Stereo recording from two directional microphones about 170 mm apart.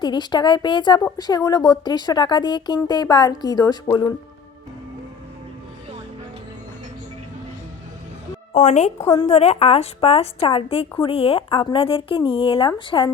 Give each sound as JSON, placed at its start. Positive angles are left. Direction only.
{"t": 0.0, "sound": "a woman's voice", "side_deg": 25}
{"t": 8.5, "sound": "a woman's voice", "side_deg": 45}